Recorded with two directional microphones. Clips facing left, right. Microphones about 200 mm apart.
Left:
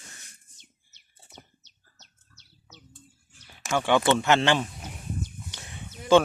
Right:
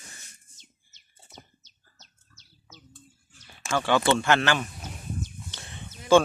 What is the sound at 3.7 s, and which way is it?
Speech, 20° left (ahead or behind).